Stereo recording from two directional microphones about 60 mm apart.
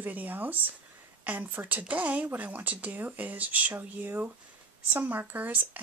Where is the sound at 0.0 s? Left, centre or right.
Right.